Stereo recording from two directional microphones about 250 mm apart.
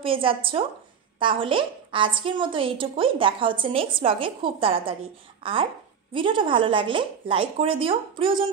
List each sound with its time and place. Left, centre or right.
0.0 s a woman's voice: right